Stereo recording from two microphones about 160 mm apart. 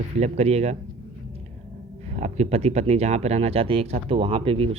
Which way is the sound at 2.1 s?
45° right (ahead or behind).